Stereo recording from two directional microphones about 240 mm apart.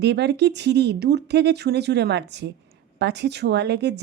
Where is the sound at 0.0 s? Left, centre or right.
Right.